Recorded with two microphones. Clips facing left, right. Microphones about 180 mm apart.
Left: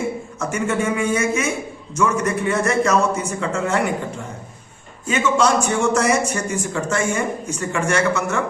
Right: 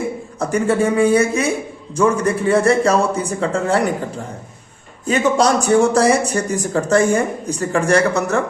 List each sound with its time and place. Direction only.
0.3 s a man's voice: 35° right (ahead or behind)
5.0 s a man's voice: 35° right (ahead or behind)